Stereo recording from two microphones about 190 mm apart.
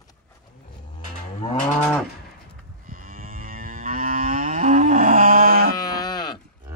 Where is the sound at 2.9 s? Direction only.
45° right (ahead or behind).